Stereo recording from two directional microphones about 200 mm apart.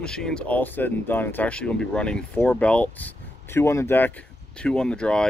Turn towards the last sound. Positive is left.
turn(degrees=5)  # may be behind; listen again after turning